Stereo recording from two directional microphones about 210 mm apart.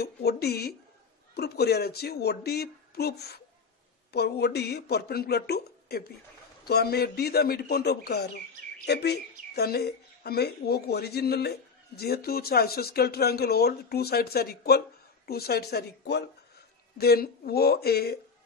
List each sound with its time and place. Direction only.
0.0 s speech: 50° left (ahead or behind)